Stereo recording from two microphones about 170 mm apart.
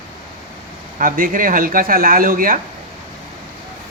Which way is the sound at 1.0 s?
55° right (ahead or behind).